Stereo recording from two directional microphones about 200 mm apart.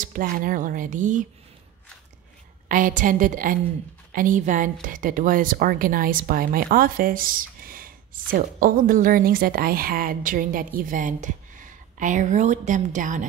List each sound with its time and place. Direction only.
0.0 s speech: 45° right (ahead or behind)
2.7 s a woman's voice: 40° right (ahead or behind)